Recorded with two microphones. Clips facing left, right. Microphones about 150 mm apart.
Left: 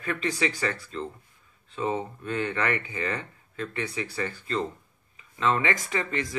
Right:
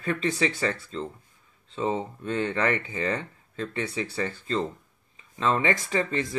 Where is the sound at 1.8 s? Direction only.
25° right (ahead or behind).